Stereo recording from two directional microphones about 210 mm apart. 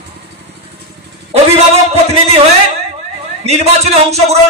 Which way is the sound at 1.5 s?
30° right (ahead or behind).